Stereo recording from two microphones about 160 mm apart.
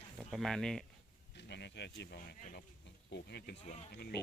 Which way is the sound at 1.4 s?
90° left.